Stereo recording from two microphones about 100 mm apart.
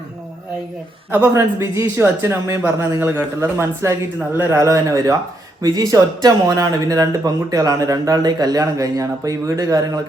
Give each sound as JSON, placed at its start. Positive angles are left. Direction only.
{"t": 1.1, "sound": "speech", "side_deg": -25}